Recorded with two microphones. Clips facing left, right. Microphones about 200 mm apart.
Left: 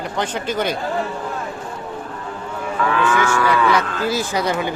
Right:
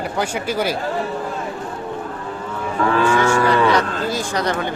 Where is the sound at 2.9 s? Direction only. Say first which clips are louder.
Right 3 dB; 30° right (ahead or behind).